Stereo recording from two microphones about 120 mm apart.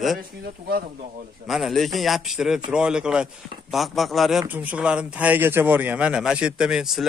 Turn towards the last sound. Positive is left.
turn(degrees=-5)  # may be behind; listen again after turning